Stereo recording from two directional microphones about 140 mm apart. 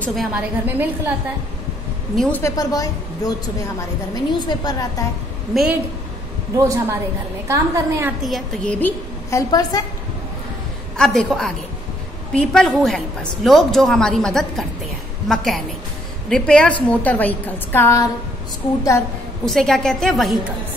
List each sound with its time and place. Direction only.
0.0 s a woman's voice: centre (ahead or behind)
2.4 s a woman's voice: 25° left (ahead or behind)
5.5 s a woman's voice: centre (ahead or behind)
6.5 s a woman's voice: 25° right (ahead or behind)
8.2 s a woman's voice: centre (ahead or behind)
8.7 s a woman's voice: 15° left (ahead or behind)
9.5 s a woman's voice: 25° left (ahead or behind)
11.0 s a woman's voice: centre (ahead or behind); by 18.1 s 20° left (ahead or behind)
19.4 s a woman's voice: centre (ahead or behind)